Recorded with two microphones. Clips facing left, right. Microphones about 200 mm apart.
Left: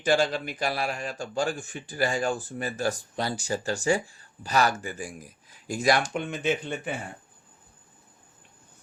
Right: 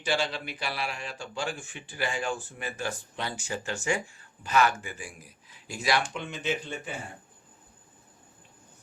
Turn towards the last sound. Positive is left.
turn(degrees=55)  # may be behind; listen again after turning